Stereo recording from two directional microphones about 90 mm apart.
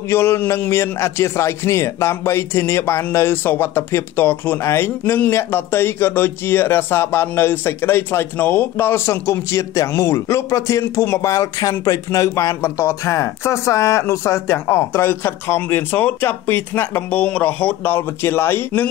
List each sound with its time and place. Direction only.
0.1 s a man's voice: 25° left (ahead or behind)